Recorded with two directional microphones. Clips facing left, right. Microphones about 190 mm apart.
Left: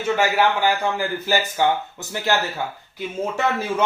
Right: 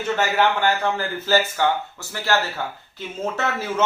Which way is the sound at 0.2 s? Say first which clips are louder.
Even; 10° left (ahead or behind).